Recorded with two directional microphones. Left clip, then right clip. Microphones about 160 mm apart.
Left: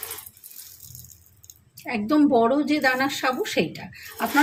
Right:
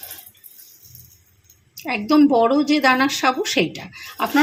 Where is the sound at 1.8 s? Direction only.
40° right (ahead or behind).